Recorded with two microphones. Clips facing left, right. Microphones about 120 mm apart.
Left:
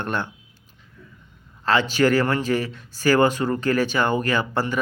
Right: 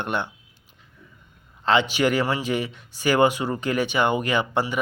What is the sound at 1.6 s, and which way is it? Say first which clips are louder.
A man's voice: left 1 dB; 20° right (ahead or behind).